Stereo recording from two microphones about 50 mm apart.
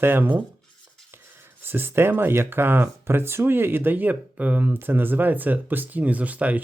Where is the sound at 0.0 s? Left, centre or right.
Right.